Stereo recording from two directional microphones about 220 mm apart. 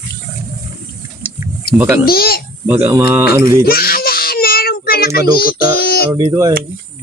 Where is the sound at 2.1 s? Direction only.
45° left (ahead or behind).